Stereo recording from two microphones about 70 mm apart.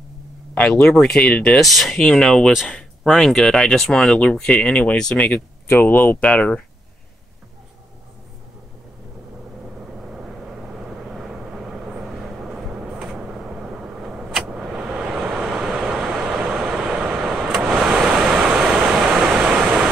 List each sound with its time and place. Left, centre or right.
0.6 s speech: centre
1.6 s speech: centre
3.0 s speech: centre
10.0 s vehicle: centre